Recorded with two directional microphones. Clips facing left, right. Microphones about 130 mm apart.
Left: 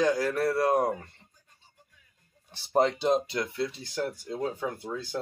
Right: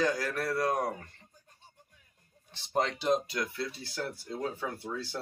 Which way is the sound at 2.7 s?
30° left (ahead or behind).